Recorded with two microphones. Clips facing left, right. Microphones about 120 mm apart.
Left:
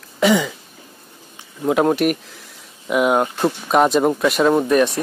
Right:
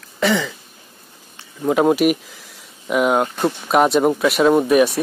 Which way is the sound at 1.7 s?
Centre (ahead or behind).